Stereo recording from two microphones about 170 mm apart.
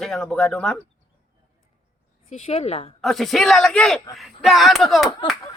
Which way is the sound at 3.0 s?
Centre (ahead or behind).